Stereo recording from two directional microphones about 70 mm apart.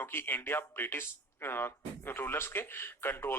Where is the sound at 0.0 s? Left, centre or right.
Left.